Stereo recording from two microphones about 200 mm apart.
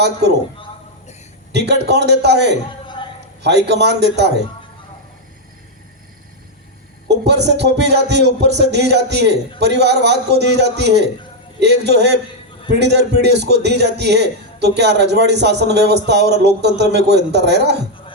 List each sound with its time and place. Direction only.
0.0 s speech: 55° right (ahead or behind)
1.5 s speech: 55° right (ahead or behind)
2.8 s a sound: 25° left (ahead or behind)
3.4 s speech: 55° right (ahead or behind)
7.1 s speech: 55° right (ahead or behind)